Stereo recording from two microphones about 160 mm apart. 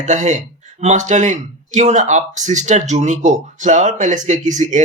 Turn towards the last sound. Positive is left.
turn(degrees=-50)  # may be behind; listen again after turning